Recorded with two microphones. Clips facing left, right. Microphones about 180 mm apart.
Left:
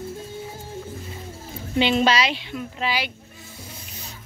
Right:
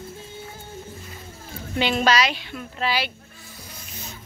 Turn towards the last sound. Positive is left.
turn(degrees=15)  # may be behind; listen again after turning